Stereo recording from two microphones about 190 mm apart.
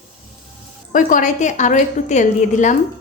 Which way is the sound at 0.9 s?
45° left (ahead or behind).